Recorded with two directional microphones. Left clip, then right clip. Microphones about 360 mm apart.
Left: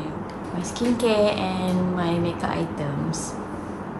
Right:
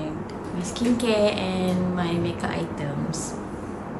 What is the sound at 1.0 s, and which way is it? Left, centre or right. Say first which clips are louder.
Speech: left 2 dB; centre.